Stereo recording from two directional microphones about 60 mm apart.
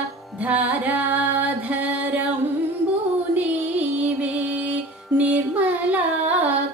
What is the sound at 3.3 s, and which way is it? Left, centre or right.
Music, right.